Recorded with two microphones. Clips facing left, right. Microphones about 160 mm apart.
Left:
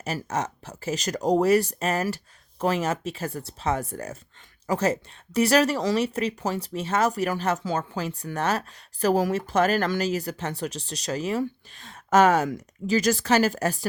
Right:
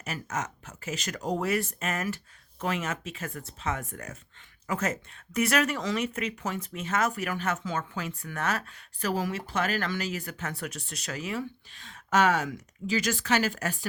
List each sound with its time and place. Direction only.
0.0 s speech: 35° left (ahead or behind)